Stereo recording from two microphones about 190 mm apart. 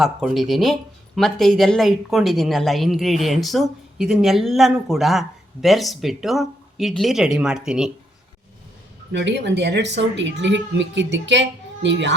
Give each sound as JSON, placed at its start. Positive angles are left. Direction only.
{"t": 0.0, "sound": "speech", "side_deg": 0}
{"t": 9.1, "sound": "speech", "side_deg": -65}